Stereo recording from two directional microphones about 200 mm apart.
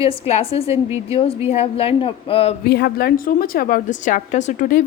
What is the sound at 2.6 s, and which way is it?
Speech, 55° left (ahead or behind).